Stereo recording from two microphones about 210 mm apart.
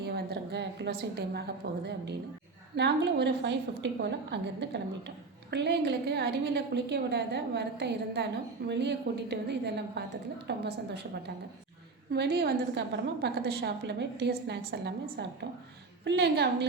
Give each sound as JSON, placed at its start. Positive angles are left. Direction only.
{"t": 0.0, "sound": "a woman's voice", "side_deg": -50}
{"t": 12.1, "sound": "a woman's voice", "side_deg": -50}